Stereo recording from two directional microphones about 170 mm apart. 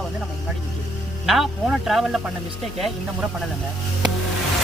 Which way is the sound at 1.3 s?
Centre (ahead or behind).